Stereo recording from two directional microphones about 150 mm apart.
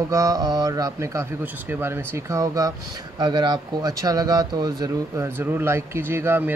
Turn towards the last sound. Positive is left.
turn(degrees=-15)  # may be behind; listen again after turning